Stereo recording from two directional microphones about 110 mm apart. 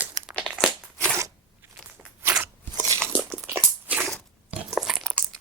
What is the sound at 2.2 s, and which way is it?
Crunch, 15° right (ahead or behind).